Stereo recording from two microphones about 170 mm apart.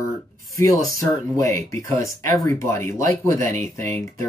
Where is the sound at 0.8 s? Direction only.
20° left (ahead or behind).